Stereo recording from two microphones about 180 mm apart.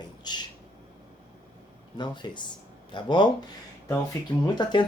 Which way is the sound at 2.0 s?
25° left (ahead or behind).